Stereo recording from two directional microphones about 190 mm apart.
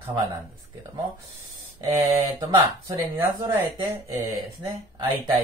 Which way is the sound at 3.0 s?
20° right (ahead or behind).